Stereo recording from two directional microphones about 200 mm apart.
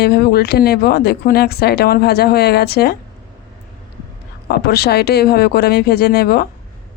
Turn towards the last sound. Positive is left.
turn(degrees=50)  # may be behind; listen again after turning